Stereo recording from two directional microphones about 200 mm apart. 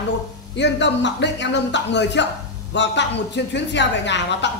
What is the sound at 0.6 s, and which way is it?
A woman's voice, 60° left (ahead or behind).